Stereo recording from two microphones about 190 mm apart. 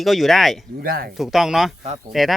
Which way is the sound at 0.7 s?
50° right (ahead or behind).